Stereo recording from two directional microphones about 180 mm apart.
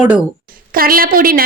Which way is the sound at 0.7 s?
55° right (ahead or behind).